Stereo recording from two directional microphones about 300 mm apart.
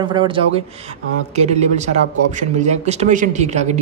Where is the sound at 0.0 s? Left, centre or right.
Centre.